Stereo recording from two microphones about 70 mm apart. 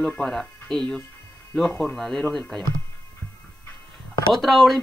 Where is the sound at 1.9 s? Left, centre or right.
Centre.